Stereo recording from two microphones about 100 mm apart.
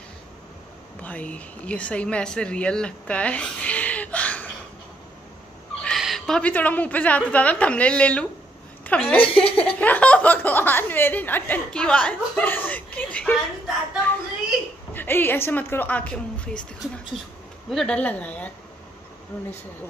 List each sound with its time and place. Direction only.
1.0 s speech: 15° left (ahead or behind)
5.9 s a woman's voice: centre (ahead or behind)
15.0 s a woman's voice: 20° left (ahead or behind)